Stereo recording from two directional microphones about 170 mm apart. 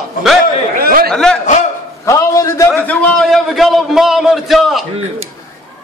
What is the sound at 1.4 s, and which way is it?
Speech, 45° left (ahead or behind).